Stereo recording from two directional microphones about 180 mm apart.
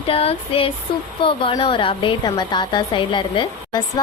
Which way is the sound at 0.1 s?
30° left (ahead or behind).